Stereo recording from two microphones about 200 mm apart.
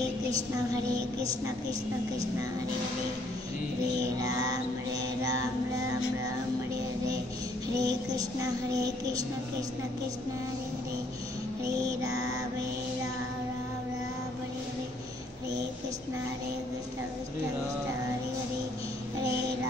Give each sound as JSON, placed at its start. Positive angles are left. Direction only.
{"t": 4.2, "sound": "child singing", "side_deg": -20}
{"t": 7.8, "sound": "child singing", "side_deg": -15}
{"t": 12.0, "sound": "child singing", "side_deg": -15}